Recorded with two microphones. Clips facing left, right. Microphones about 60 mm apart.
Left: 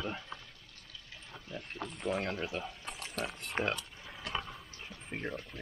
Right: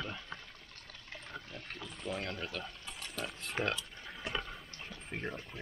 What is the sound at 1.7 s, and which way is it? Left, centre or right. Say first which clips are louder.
Speech: left 6 dB; left.